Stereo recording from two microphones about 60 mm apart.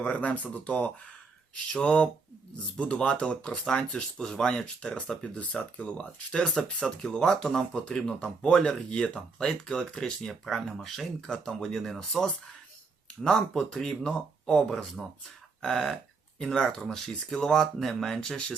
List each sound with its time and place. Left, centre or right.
0.0 s speech: left
6.4 s speech: centre